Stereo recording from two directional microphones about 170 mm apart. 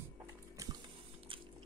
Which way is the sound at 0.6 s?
20° right (ahead or behind).